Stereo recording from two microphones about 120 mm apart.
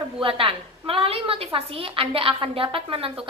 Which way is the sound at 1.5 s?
50° right (ahead or behind).